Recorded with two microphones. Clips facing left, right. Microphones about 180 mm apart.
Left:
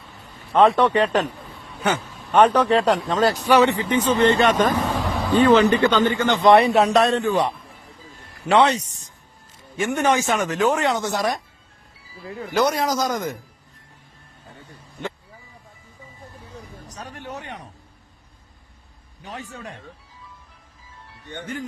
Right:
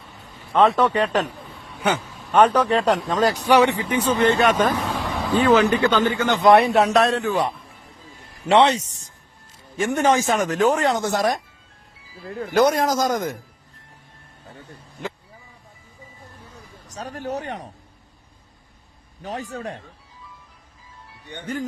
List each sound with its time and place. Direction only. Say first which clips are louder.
0.5 s speech: left 1 dB; centre (ahead or behind)
1.3 s a sound: even; centre (ahead or behind)
2.5 s speech: left 1 dB; 10° right (ahead or behind)
4.7 s speech: left 2 dB; 10° left (ahead or behind)
8.4 s a man's voice: right 1 dB; 25° right (ahead or behind); by 13.4 s 50° right (ahead or behind)
16.9 s speech: right 7 dB; 35° right (ahead or behind)
19.2 s speech: right 6 dB; 40° right (ahead or behind)